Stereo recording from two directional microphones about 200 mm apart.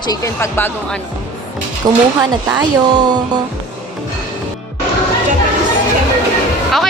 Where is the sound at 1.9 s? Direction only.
20° right (ahead or behind).